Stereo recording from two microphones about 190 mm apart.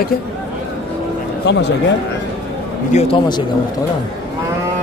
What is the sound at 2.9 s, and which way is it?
Speech, 35° left (ahead or behind).